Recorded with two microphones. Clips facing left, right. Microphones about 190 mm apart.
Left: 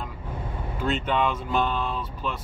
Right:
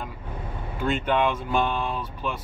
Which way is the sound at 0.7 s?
5° right (ahead or behind).